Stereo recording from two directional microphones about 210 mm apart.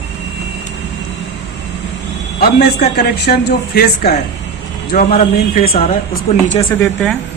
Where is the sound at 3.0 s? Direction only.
50° left (ahead or behind).